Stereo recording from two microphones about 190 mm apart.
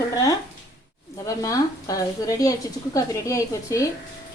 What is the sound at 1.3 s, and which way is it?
A woman's voice, 15° left (ahead or behind).